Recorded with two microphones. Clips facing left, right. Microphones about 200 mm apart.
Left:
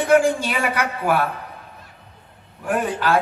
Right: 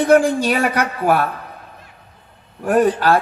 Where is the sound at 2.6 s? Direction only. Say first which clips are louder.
Right 7 dB; 40° right (ahead or behind).